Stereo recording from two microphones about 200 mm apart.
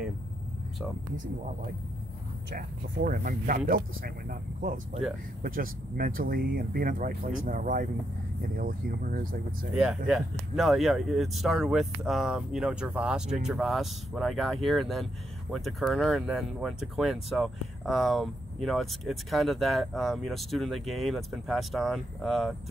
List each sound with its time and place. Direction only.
2.5 s speech: 45° right (ahead or behind)
9.8 s speech: 5° right (ahead or behind)